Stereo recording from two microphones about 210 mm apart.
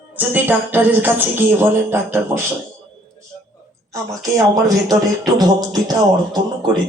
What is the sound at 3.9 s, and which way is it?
Speech, 15° right (ahead or behind).